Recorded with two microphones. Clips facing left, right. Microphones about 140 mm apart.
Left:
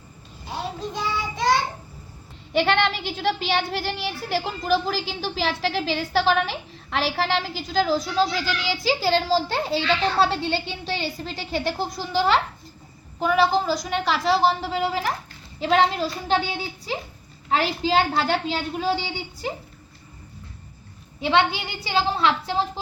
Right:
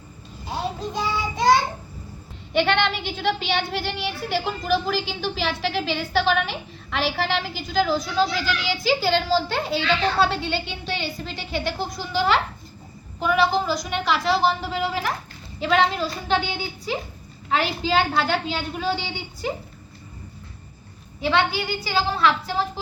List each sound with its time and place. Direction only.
0.8 s child singing: centre (ahead or behind)
2.5 s a child's voice: 35° left (ahead or behind)
21.2 s a woman's voice: 20° left (ahead or behind)